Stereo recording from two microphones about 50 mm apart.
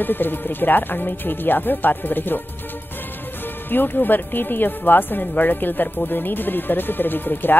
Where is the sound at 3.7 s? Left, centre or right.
Left.